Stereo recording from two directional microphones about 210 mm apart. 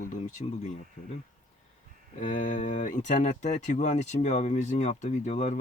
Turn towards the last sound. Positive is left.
turn(degrees=35)  # may be behind; listen again after turning